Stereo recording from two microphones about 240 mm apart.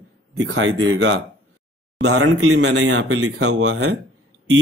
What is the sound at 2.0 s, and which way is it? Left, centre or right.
Speech, right.